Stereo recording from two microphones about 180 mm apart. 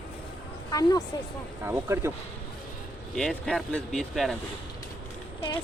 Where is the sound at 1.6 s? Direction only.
15° right (ahead or behind).